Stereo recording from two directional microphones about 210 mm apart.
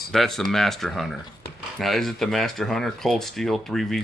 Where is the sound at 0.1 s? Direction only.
Centre (ahead or behind).